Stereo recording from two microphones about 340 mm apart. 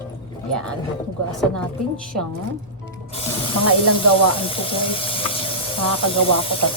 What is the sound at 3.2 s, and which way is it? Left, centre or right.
Speech, centre.